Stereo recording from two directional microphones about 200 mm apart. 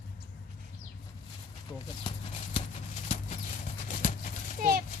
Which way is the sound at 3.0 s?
30° left (ahead or behind).